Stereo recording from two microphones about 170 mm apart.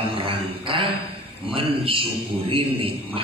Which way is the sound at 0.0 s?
30° right (ahead or behind).